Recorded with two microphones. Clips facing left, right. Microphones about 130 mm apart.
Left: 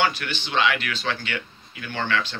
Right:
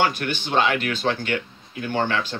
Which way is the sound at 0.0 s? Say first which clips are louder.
Right 2 dB; 45° right (ahead or behind).